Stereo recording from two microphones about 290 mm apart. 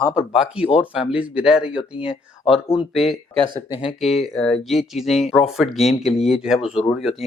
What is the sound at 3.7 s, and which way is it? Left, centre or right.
Speech, centre.